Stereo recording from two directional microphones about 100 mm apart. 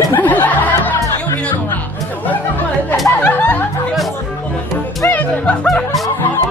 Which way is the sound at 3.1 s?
20° left (ahead or behind).